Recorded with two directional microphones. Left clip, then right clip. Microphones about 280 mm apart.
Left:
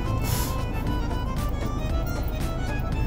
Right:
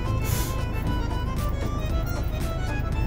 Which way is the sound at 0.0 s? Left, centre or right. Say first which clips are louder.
Left 1 dB; centre.